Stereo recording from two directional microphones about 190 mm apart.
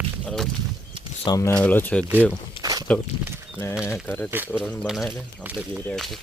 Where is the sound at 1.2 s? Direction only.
20° left (ahead or behind).